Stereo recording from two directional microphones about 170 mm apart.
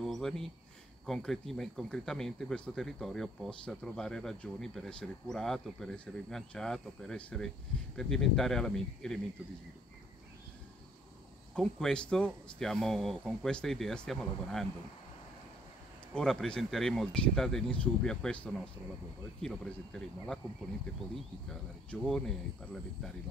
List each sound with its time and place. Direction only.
0.0 s a sound: centre (ahead or behind)
1.0 s speech: centre (ahead or behind)
11.5 s speech: 5° left (ahead or behind)
16.2 s speech: 5° left (ahead or behind)
22.0 s speech: centre (ahead or behind)